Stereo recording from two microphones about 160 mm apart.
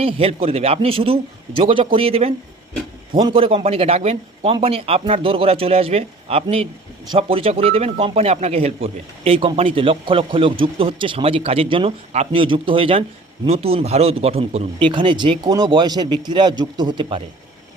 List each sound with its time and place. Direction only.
0.0 s a man's voice: 35° right (ahead or behind)